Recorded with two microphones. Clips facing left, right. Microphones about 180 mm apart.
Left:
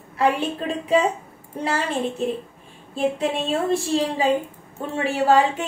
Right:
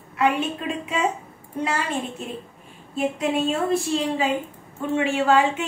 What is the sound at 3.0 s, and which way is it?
A woman's voice, 30° left (ahead or behind).